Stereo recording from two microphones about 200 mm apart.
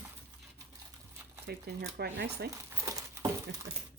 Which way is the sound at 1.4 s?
50° right (ahead or behind).